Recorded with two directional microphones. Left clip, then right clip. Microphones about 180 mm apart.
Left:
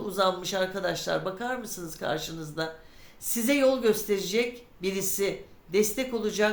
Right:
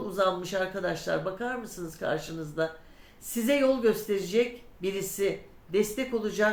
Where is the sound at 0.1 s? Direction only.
25° left (ahead or behind).